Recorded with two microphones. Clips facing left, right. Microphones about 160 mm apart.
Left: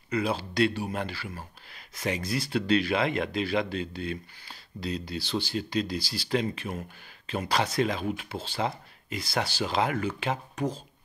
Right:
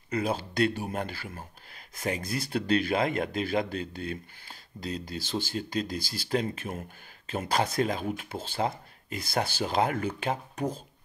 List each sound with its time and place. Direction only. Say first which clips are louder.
0.1 s speech: left 1 dB; 45° right (ahead or behind)